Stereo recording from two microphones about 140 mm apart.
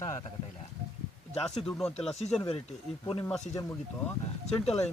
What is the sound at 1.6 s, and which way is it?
Speech, 5° left (ahead or behind).